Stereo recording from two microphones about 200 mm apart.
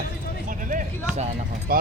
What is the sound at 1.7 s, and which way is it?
Speech, 45° right (ahead or behind).